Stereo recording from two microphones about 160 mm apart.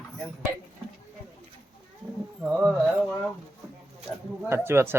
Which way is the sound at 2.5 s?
Centre (ahead or behind).